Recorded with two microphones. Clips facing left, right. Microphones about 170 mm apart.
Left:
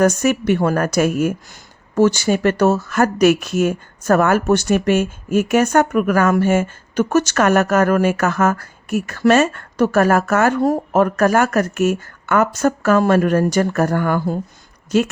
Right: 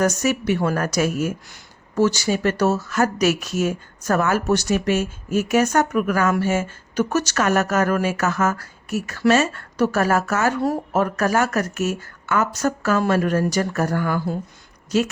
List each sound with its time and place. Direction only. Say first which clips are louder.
0.0 s speech: left 5 dB; 55° left (ahead or behind)